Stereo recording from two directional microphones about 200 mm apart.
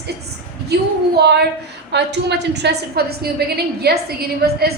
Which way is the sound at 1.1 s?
55° right (ahead or behind).